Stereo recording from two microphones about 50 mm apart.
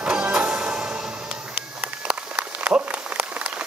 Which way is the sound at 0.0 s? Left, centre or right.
Centre.